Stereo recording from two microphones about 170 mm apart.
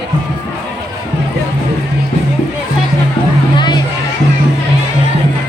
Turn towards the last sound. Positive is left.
turn(degrees=25)  # may be behind; listen again after turning